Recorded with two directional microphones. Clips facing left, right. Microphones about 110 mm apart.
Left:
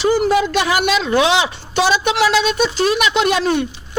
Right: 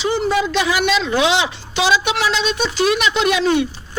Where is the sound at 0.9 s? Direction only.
45° left (ahead or behind).